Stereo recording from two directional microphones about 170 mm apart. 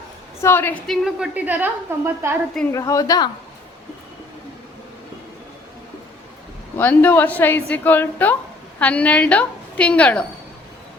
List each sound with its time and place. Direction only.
0.4 s a woman's voice: 15° left (ahead or behind)
0.9 s a woman's voice: 5° right (ahead or behind)
2.7 s a woman's voice: 20° left (ahead or behind)
6.7 s a woman's voice: 10° left (ahead or behind)